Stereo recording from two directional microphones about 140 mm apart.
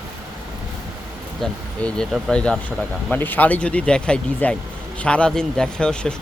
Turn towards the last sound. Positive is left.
turn(degrees=5)  # may be behind; listen again after turning